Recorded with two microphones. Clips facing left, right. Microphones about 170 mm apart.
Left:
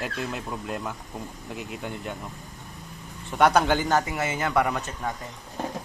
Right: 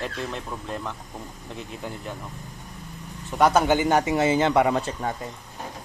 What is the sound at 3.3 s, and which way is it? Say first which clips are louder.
Speech: right 1 dB; centre (ahead or behind).